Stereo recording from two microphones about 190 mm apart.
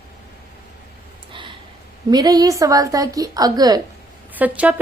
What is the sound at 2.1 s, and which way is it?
A woman's voice, 20° right (ahead or behind).